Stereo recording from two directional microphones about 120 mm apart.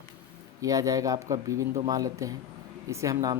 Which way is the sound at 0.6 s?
30° right (ahead or behind).